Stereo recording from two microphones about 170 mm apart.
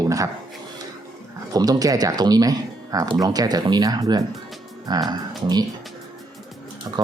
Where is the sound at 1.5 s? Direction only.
20° right (ahead or behind).